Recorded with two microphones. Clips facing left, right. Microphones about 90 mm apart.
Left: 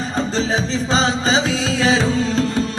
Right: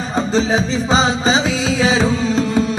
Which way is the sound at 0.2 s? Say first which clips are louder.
Right 4 dB; 5° right (ahead or behind).